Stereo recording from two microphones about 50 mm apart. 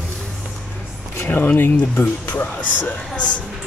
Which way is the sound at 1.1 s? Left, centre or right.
Left.